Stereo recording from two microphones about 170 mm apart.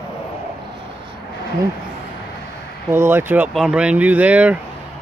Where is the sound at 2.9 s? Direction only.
15° right (ahead or behind).